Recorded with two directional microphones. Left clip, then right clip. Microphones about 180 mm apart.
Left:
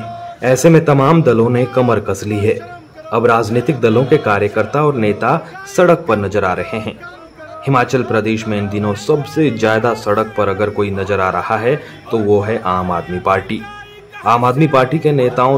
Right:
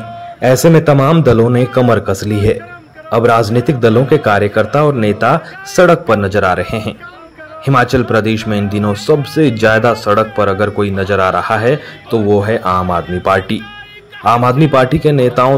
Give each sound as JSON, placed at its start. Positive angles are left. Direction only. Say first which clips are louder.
{"t": 0.4, "sound": "a man's voice", "louder": "right 1 dB", "side_deg": -20}